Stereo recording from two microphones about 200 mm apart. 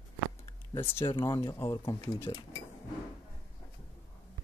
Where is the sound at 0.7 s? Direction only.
10° left (ahead or behind).